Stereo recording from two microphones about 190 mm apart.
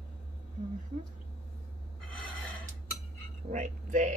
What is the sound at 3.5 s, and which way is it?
Speech, 40° right (ahead or behind).